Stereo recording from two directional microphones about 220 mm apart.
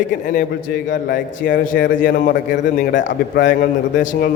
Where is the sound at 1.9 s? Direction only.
40° left (ahead or behind).